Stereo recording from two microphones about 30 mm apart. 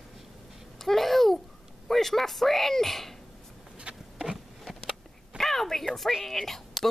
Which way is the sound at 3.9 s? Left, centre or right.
Right.